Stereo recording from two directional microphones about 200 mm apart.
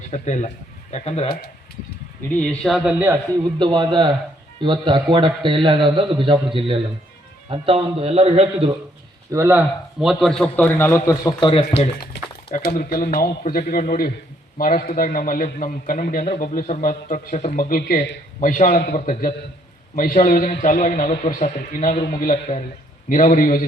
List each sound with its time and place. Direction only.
0.1 s speech: 35° left (ahead or behind)
2.3 s speech: 5° left (ahead or behind)
3.6 s a man's voice: 20° right (ahead or behind)
9.3 s a man's voice: 10° right (ahead or behind); by 11.6 s 25° left (ahead or behind)
12.1 s a sound: 55° left (ahead or behind)
12.5 s a man's voice: 45° left (ahead or behind)
18.3 s a man's voice: 40° left (ahead or behind)